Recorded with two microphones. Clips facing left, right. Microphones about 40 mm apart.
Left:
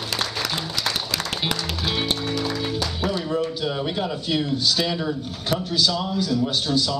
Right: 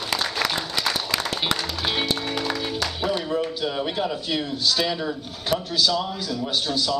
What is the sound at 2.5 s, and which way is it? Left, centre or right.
A man's voice, centre.